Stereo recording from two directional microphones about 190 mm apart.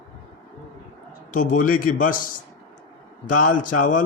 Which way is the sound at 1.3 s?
45° left (ahead or behind).